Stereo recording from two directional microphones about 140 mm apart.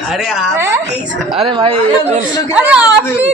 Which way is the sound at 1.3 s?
45° right (ahead or behind).